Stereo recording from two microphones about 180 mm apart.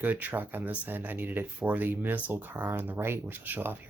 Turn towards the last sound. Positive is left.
turn(degrees=-10)  # may be behind; listen again after turning